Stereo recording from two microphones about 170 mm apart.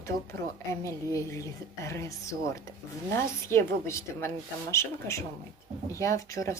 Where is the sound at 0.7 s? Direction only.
15° left (ahead or behind).